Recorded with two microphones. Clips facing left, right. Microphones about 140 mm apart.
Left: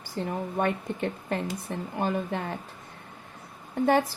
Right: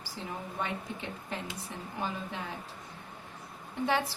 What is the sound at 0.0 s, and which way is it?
Speech, 55° left (ahead or behind).